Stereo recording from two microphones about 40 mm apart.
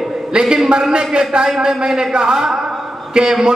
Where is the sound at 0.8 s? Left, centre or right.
Centre.